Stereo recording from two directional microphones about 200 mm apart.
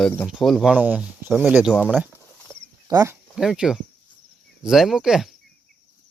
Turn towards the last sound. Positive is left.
turn(degrees=0)  # may be behind; listen again after turning